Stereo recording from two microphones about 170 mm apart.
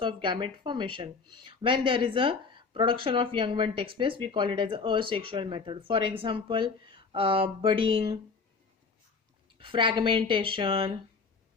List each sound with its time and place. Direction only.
0.0 s speech: 30° right (ahead or behind)
9.6 s speech: 30° right (ahead or behind)